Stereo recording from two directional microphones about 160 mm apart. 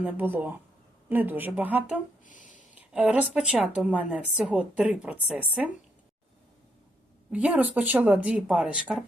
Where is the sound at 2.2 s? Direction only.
55° left (ahead or behind).